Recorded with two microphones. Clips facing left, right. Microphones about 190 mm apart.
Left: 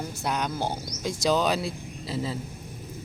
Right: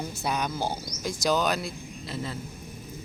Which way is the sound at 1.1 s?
25° left (ahead or behind).